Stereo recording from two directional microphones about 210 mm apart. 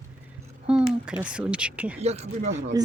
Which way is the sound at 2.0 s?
30° right (ahead or behind).